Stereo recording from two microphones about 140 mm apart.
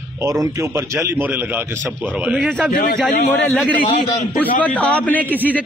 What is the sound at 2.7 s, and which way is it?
Speech, 90° left.